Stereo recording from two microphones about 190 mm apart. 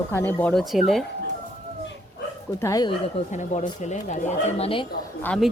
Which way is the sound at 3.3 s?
40° left (ahead or behind).